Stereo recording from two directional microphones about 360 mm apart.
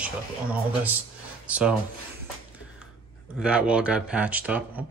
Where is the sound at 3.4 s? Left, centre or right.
Centre.